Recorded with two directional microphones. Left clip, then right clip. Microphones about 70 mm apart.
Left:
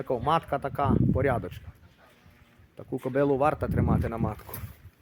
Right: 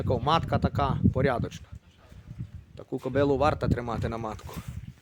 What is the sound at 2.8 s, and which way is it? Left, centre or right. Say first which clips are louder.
Speech: even; centre.